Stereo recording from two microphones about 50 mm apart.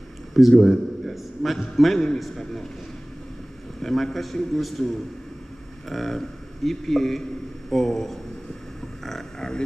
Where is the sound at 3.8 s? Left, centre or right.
Centre.